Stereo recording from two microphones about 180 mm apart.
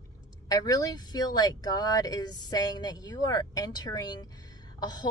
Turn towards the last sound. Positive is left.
turn(degrees=25)  # may be behind; listen again after turning